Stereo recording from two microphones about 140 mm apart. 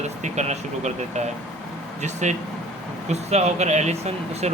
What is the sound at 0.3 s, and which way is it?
Speech, 55° right (ahead or behind).